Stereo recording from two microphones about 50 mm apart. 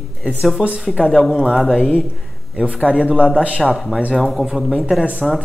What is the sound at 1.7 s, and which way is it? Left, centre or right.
A man's voice, centre.